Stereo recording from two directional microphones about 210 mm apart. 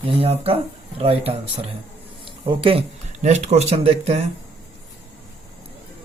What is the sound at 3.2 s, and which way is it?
Speech, 35° right (ahead or behind).